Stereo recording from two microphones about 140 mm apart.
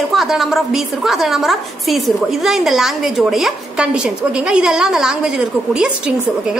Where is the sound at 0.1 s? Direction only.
Centre (ahead or behind).